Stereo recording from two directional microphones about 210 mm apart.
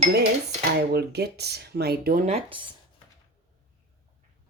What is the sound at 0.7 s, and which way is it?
Speech, 50° right (ahead or behind).